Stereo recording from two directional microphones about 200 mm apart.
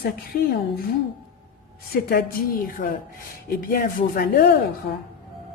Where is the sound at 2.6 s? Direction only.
45° left (ahead or behind).